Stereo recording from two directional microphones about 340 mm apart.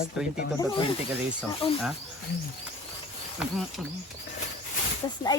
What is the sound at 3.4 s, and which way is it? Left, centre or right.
Speech, centre.